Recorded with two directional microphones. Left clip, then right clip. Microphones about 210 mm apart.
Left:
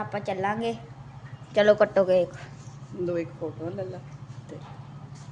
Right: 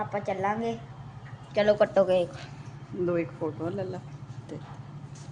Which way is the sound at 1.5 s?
30° left (ahead or behind).